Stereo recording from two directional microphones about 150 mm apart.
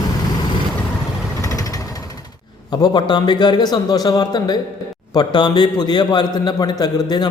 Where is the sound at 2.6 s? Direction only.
25° left (ahead or behind).